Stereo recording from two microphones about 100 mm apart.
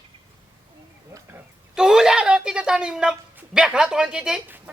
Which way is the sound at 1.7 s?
5° right (ahead or behind).